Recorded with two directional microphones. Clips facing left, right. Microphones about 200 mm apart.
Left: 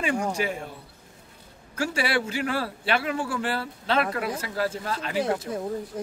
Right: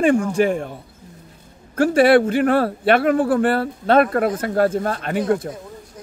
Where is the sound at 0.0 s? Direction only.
50° right (ahead or behind).